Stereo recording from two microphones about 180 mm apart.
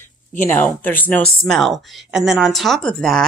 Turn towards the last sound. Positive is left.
turn(degrees=5)  # may be behind; listen again after turning